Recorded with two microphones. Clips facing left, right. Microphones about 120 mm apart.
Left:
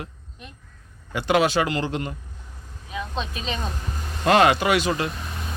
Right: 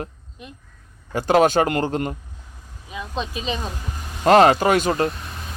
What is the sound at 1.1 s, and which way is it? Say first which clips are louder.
Speech: right 4 dB; 40° right (ahead or behind).